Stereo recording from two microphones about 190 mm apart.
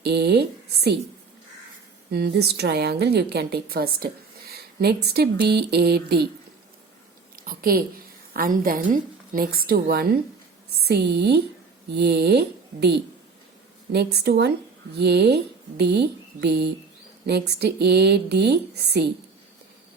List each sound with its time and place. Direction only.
0.0 s a sound: 60° right (ahead or behind)
2.0 s a woman's voice: 60° right (ahead or behind)
7.3 s a woman's voice: 50° right (ahead or behind)